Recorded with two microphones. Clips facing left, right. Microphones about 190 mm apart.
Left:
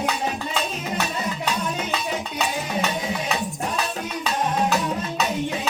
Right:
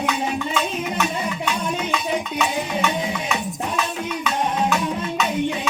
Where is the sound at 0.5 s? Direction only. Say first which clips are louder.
Right 3 dB; 35° left (ahead or behind).